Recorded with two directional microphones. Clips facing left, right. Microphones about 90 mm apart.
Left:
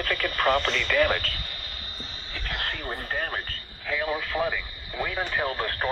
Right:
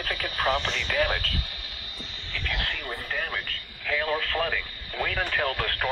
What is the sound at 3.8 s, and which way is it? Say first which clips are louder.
Speech: right 1 dB; 15° left (ahead or behind).